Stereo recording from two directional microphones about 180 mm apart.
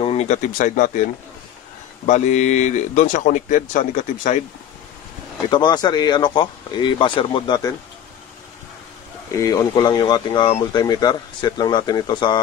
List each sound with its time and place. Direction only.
0.0 s speech: 35° left (ahead or behind)
2.0 s speech: 40° left (ahead or behind)
5.5 s speech: 25° left (ahead or behind)
9.3 s speech: 20° left (ahead or behind)